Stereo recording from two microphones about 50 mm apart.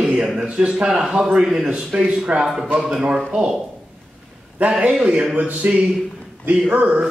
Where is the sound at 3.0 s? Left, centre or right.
Centre.